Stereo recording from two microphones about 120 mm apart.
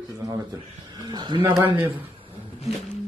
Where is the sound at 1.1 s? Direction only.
40° right (ahead or behind).